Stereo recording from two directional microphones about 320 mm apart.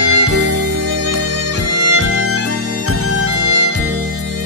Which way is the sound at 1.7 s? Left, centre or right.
Right.